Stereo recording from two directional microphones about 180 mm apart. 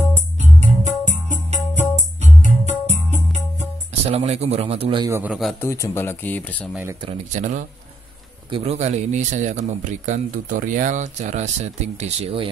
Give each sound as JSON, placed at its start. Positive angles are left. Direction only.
{"t": 0.4, "sound": "music", "side_deg": -40}
{"t": 3.5, "sound": "speech", "side_deg": -35}
{"t": 5.0, "sound": "a man's voice", "side_deg": -15}
{"t": 5.3, "sound": "a man's voice", "side_deg": 0}
{"t": 5.6, "sound": "speech", "side_deg": 15}
{"t": 6.7, "sound": "a man's voice", "side_deg": -15}
{"t": 7.3, "sound": "speech", "side_deg": -45}
{"t": 8.5, "sound": "speech", "side_deg": -30}